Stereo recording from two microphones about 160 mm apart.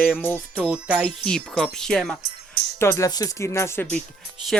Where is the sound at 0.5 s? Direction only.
10° right (ahead or behind).